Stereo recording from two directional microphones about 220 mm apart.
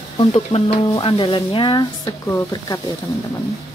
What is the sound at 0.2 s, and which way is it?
Speech, 25° left (ahead or behind).